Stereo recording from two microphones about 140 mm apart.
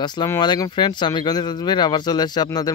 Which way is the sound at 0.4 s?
30° left (ahead or behind).